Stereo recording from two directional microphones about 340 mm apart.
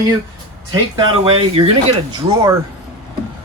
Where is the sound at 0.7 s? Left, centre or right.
Centre.